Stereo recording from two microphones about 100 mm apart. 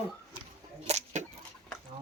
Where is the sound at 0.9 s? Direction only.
90° right.